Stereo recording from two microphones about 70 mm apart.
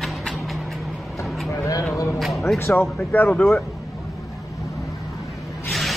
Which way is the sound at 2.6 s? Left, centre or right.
Left.